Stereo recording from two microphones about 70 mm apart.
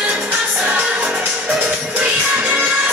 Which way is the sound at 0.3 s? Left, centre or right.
Centre.